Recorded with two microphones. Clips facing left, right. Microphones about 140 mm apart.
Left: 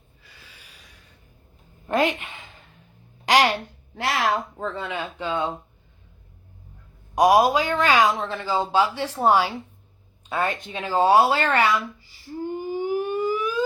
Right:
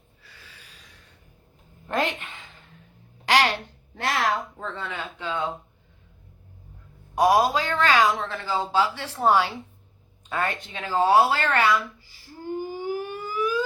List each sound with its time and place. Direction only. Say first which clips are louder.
0.2 s snort: even; 15° left (ahead or behind)
1.9 s a sound: left 4 dB; 10° left (ahead or behind)
3.2 s a woman's voice: left 2 dB; 15° left (ahead or behind)
7.2 s speech: left 3 dB; 15° left (ahead or behind)
12.7 s siren: left 5 dB; 20° left (ahead or behind)